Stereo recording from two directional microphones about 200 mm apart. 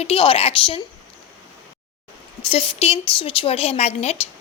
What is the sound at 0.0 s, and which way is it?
Speech, 30° left (ahead or behind).